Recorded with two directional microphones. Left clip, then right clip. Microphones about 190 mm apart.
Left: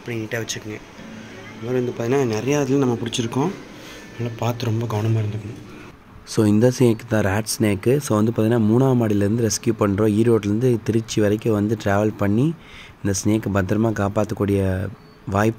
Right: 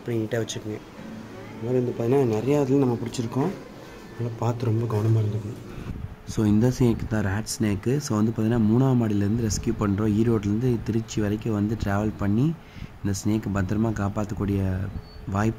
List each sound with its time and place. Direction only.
0.1 s speech: 25° right (ahead or behind)
1.7 s speech: centre (ahead or behind)
4.4 s speech: 5° right (ahead or behind)
6.3 s speech: 15° left (ahead or behind)